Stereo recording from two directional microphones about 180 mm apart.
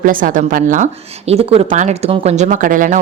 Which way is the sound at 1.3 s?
35° right (ahead or behind).